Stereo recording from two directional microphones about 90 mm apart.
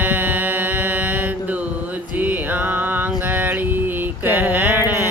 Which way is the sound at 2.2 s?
20° right (ahead or behind).